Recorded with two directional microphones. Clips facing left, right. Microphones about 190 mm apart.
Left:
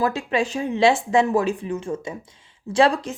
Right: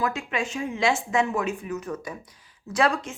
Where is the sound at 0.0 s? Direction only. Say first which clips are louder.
Left 6 dB; 35° left (ahead or behind).